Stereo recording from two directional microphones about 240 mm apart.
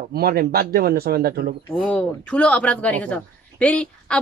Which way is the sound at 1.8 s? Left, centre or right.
Centre.